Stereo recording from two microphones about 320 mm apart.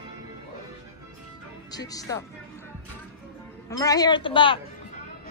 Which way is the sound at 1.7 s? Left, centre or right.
Centre.